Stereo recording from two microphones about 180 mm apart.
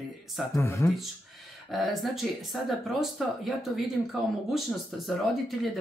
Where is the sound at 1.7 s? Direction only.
Centre (ahead or behind).